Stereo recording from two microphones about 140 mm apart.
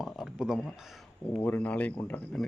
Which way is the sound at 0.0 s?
5° right (ahead or behind).